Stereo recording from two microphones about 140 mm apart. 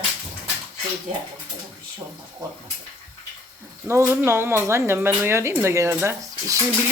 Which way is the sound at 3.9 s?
20° right (ahead or behind).